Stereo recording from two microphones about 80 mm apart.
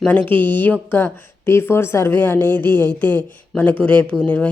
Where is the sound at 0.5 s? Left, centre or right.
Left.